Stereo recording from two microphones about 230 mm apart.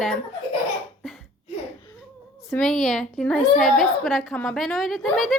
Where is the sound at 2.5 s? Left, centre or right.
Centre.